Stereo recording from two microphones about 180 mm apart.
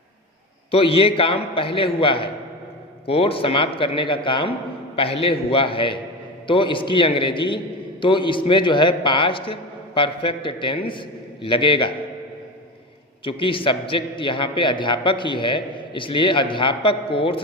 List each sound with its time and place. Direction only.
0.7 s a man's voice: 30° left (ahead or behind)
13.2 s a man's voice: 30° left (ahead or behind)